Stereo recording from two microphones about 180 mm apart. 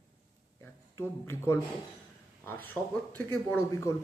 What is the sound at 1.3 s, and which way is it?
Speech, 15° left (ahead or behind).